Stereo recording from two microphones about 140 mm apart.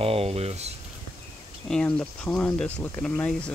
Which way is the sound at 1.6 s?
5° left (ahead or behind).